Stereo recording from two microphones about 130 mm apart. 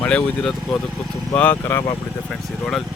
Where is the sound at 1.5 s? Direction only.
20° left (ahead or behind).